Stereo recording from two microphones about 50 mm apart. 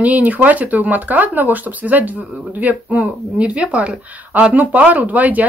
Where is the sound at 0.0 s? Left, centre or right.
Right.